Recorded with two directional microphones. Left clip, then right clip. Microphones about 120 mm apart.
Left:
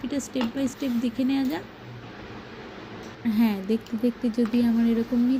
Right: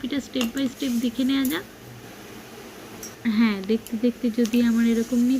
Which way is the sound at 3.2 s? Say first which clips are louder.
Right 2 dB; 25° left (ahead or behind).